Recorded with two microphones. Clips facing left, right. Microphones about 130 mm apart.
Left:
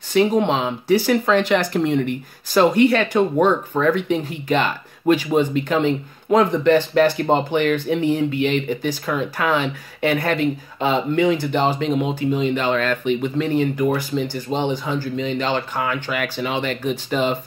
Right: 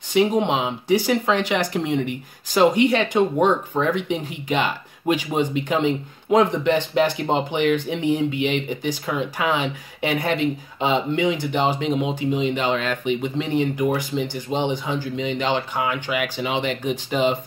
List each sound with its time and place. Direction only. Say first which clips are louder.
0.1 s speech: left 2 dB; 10° right (ahead or behind)